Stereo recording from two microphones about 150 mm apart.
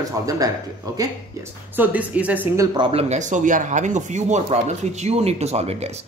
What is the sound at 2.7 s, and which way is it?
Speech, 35° right (ahead or behind).